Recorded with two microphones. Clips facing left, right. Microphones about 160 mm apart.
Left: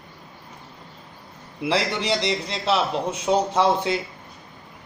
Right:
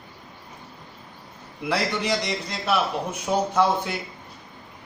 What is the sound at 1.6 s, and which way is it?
Speech, 25° left (ahead or behind).